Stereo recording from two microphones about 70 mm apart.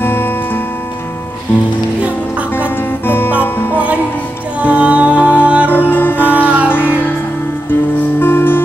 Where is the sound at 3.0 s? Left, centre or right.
Left.